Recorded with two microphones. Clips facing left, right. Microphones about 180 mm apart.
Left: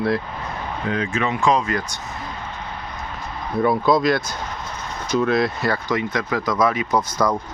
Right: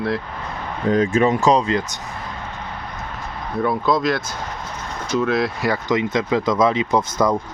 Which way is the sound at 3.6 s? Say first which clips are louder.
Left 2 dB; centre (ahead or behind).